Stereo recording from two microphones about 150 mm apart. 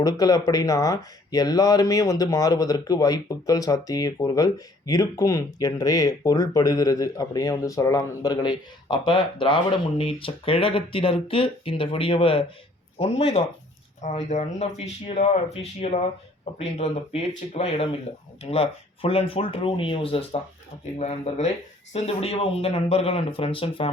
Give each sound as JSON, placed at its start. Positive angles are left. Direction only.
{"t": 0.0, "sound": "speech", "side_deg": 25}